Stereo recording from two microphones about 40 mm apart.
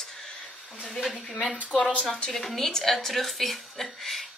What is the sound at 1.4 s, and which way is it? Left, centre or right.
Speech, left.